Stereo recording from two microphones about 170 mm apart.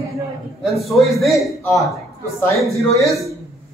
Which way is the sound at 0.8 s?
Centre (ahead or behind).